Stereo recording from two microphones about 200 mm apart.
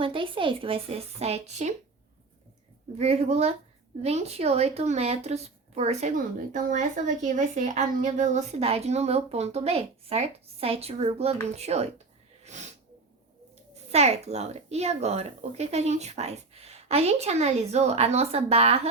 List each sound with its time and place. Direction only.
0.0 s speech: 25° right (ahead or behind)
3.0 s speech: 30° right (ahead or behind)
12.4 s sneeze: 35° right (ahead or behind)
13.9 s speech: 30° right (ahead or behind)